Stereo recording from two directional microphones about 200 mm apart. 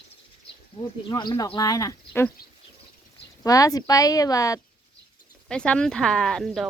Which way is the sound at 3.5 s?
15° left (ahead or behind).